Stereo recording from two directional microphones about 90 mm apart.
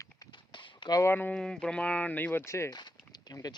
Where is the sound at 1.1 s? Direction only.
20° left (ahead or behind).